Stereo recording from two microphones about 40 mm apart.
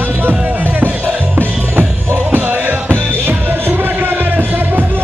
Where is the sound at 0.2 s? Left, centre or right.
Right.